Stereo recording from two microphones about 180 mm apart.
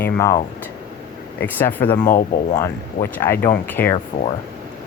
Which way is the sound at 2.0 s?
45° left (ahead or behind).